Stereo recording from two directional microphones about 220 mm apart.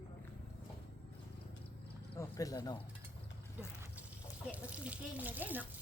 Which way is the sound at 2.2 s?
15° left (ahead or behind).